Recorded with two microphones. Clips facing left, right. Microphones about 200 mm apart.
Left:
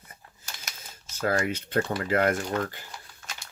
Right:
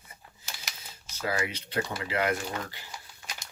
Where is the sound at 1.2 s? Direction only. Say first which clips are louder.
Left 5 dB; 50° left (ahead or behind).